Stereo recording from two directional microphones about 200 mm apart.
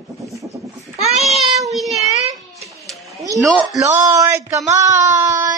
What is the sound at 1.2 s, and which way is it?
Child singing, centre (ahead or behind).